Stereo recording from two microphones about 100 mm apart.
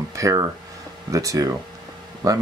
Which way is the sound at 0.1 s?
35° right (ahead or behind).